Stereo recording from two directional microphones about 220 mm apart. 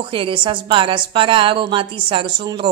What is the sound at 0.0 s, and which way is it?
A woman's voice, 20° right (ahead or behind).